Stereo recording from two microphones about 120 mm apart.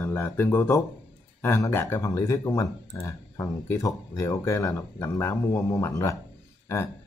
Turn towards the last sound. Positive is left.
turn(degrees=20)  # may be behind; listen again after turning